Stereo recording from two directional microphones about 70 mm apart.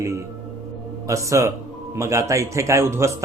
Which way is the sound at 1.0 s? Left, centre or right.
Right.